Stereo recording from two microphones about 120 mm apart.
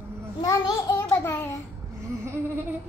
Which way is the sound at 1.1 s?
15° left (ahead or behind).